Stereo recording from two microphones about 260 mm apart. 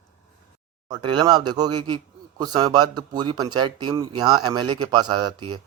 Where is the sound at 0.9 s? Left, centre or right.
Centre.